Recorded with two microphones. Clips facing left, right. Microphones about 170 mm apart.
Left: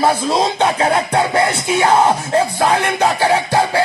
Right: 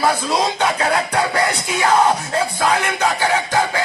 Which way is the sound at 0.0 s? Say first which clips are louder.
Left 3 dB; 25° left (ahead or behind).